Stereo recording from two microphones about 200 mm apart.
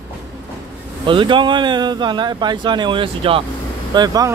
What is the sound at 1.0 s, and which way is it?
Speech, 25° right (ahead or behind).